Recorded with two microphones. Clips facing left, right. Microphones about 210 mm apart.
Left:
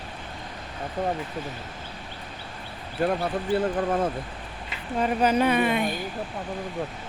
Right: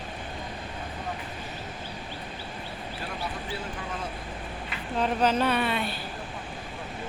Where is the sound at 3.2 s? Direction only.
55° left (ahead or behind).